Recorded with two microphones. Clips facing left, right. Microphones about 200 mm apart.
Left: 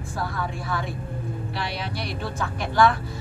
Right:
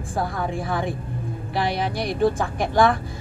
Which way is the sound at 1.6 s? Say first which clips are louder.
Right 10 dB; 55° right (ahead or behind).